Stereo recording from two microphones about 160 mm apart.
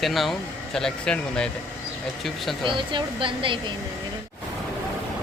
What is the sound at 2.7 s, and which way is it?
Speech, 30° right (ahead or behind).